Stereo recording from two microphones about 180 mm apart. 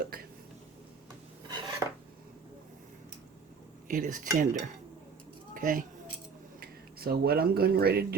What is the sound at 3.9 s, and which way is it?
Speech, 45° right (ahead or behind).